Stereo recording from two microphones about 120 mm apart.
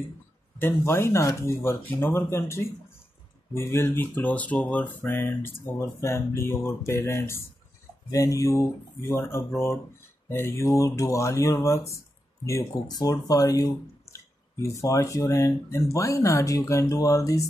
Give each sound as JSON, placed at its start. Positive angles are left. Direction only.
{"t": 0.6, "sound": "speech", "side_deg": 20}